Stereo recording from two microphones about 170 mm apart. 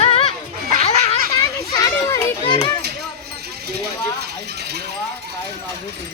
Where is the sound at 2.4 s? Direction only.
30° left (ahead or behind).